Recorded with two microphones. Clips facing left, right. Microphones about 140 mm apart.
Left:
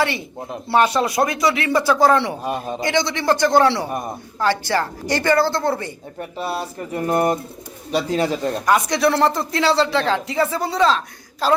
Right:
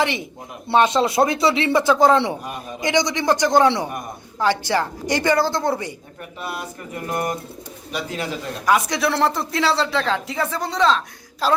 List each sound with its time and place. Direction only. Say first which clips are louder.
0.0 s a woman's voice: left 1 dB; 15° right (ahead or behind)
2.4 s a man's voice: left 7 dB; 30° left (ahead or behind)
2.8 s a woman's voice: right 1 dB; 15° right (ahead or behind)
6.1 s speech: left 7 dB; 30° left (ahead or behind)
8.6 s speech: left 1 dB; centre (ahead or behind)